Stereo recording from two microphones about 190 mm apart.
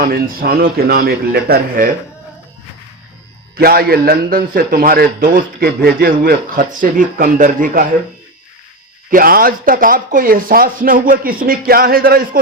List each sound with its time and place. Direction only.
0.0 s a man's voice: 50° right (ahead or behind)
3.5 s a man's voice: 50° right (ahead or behind)
9.0 s a man's voice: 50° right (ahead or behind)